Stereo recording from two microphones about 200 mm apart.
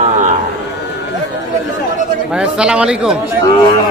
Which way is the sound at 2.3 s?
5° right (ahead or behind).